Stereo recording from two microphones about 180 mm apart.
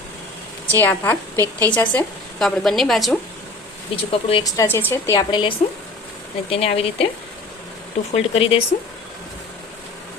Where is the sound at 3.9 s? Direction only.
30° left (ahead or behind).